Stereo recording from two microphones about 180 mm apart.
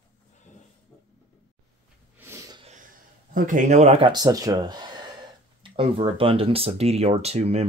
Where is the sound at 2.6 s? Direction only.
40° right (ahead or behind).